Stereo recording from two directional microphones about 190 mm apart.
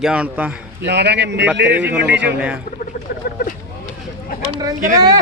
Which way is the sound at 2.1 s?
65° right (ahead or behind).